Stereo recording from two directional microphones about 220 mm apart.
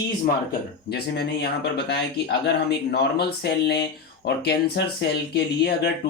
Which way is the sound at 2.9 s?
50° left (ahead or behind).